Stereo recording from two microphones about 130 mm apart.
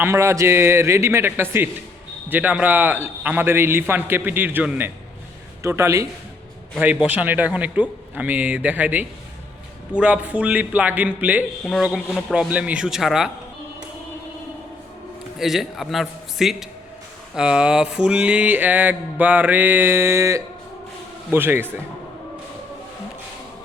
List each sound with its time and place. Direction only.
0.0 s a man's voice: 20° right (ahead or behind)
2.3 s mantra: 10° right (ahead or behind)
5.6 s a man's voice: 20° right (ahead or behind)
6.7 s mantra: 10° right (ahead or behind)
11.8 s speech: 5° right (ahead or behind)
15.4 s speech: centre (ahead or behind)
17.3 s mantra: 5° right (ahead or behind)